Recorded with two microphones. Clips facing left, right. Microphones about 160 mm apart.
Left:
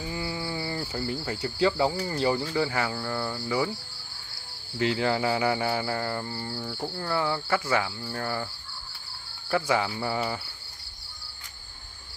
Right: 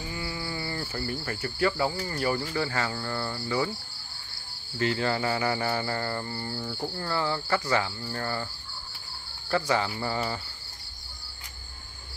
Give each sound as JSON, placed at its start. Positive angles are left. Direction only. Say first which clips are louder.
{"t": 0.0, "sound": "cricket", "louder": "left 3 dB", "side_deg": 20}
{"t": 4.7, "sound": "cricket", "louder": "left 2 dB", "side_deg": 15}
{"t": 9.5, "sound": "cricket", "louder": "left 1 dB", "side_deg": 10}